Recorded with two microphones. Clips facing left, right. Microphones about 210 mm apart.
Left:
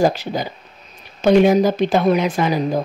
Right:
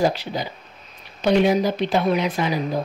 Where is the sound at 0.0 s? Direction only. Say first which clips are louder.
Left 4 dB; 45° left (ahead or behind).